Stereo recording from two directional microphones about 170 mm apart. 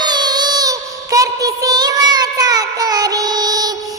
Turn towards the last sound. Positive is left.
turn(degrees=-20)  # may be behind; listen again after turning